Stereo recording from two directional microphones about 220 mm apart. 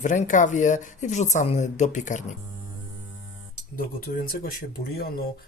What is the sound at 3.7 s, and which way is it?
Speech, 40° left (ahead or behind).